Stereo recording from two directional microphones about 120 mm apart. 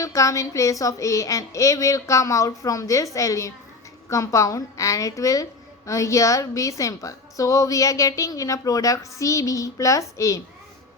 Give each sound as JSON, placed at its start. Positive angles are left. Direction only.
{"t": 0.0, "sound": "a woman's voice", "side_deg": 25}